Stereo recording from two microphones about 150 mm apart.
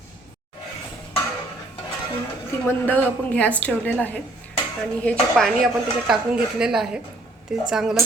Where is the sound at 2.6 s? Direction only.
10° left (ahead or behind).